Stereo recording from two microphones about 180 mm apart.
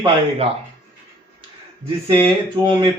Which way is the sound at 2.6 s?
25° right (ahead or behind).